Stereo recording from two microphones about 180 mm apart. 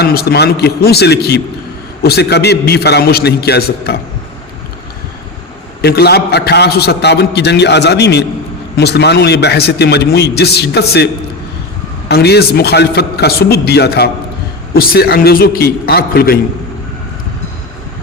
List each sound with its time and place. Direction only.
0.0 s a man's voice: 60° left (ahead or behind)
5.8 s a man's voice: 60° left (ahead or behind)